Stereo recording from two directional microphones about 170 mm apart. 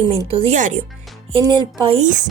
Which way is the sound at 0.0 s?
30° right (ahead or behind).